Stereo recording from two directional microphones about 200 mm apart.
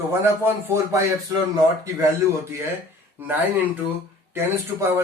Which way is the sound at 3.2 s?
10° right (ahead or behind).